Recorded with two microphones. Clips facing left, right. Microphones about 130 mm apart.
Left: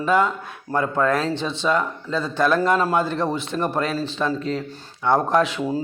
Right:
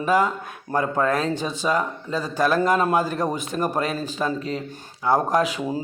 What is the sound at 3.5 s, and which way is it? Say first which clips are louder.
Speech: even; 10° right (ahead or behind).